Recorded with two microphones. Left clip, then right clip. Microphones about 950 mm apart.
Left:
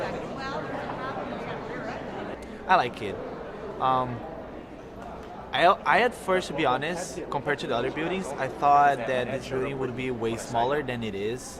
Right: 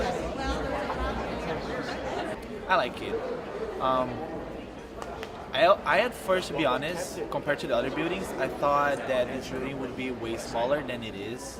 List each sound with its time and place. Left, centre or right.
2.6 s a man's voice: left
5.5 s a man's voice: left